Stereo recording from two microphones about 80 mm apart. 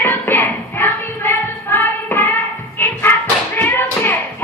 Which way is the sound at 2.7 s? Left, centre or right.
Left.